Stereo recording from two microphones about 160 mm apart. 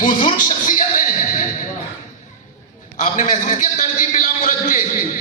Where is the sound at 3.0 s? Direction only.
50° left (ahead or behind).